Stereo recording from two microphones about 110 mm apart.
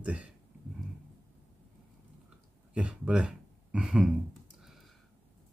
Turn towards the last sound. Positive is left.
turn(degrees=-5)  # may be behind; listen again after turning